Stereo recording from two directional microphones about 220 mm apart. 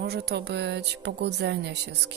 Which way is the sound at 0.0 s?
45° right (ahead or behind).